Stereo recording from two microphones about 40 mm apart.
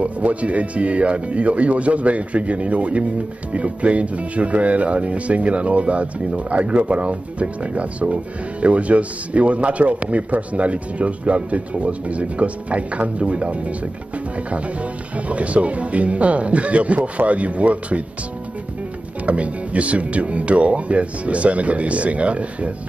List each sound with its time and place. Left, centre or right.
0.0 s speech: right
19.2 s speech: right